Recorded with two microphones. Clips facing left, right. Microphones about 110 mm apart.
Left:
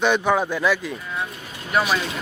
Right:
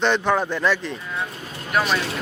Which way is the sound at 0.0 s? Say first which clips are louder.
Left 1 dB; 10° left (ahead or behind).